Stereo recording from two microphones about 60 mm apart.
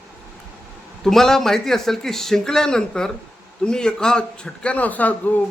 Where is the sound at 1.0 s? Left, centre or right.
Centre.